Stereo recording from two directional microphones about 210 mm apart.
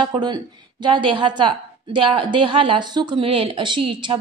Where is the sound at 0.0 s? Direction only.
20° right (ahead or behind).